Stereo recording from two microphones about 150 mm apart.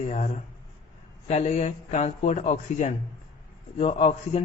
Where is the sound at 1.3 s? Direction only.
50° left (ahead or behind).